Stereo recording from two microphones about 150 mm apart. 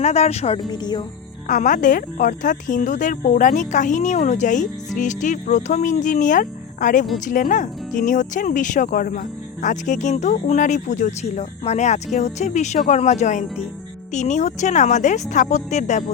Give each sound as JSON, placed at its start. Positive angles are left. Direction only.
{"t": 0.0, "sound": "speech", "side_deg": 45}
{"t": 0.7, "sound": "speech", "side_deg": 30}
{"t": 1.5, "sound": "speech", "side_deg": 60}